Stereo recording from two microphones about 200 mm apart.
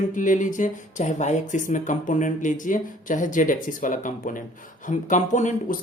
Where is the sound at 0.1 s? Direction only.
40° left (ahead or behind).